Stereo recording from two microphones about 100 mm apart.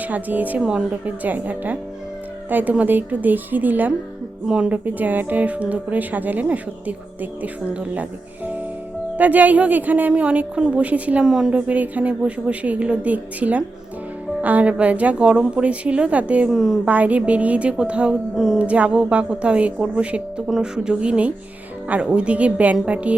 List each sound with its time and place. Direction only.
0.0 s speech: 15° right (ahead or behind)
9.1 s speech: 15° right (ahead or behind)
16.5 s speech: 5° right (ahead or behind)
16.8 s speech: 15° right (ahead or behind)